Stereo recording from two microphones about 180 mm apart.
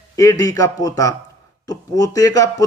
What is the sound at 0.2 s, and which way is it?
A man's voice, 20° left (ahead or behind).